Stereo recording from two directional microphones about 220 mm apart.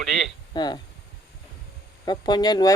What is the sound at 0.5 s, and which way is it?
Speech, 20° left (ahead or behind).